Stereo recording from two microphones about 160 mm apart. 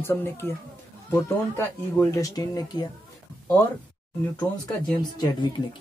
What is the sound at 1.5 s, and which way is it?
Speech, 20° left (ahead or behind).